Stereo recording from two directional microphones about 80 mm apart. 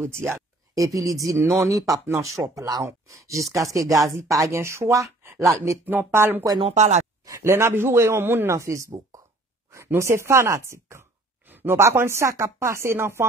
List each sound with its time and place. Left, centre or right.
0.0 s speech: right
0.7 s speech: right
5.9 s speech: right
8.5 s a woman's voice: right
11.4 s a sound: right
11.7 s speech: right